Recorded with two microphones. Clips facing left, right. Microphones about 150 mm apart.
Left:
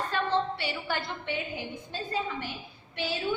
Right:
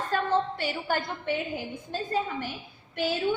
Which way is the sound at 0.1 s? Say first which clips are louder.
Right 4 dB; 45° right (ahead or behind).